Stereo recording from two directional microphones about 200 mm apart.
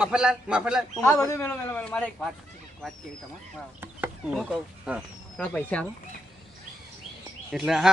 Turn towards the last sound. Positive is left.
turn(degrees=0)  # may be behind; listen again after turning